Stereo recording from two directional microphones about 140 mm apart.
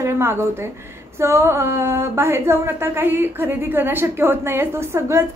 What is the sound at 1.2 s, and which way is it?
A woman's voice, 20° right (ahead or behind).